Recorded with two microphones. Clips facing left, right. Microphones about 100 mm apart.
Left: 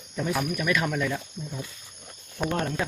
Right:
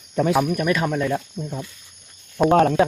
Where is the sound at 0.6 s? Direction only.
30° right (ahead or behind).